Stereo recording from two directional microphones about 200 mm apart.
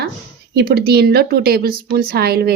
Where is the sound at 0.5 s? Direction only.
55° right (ahead or behind).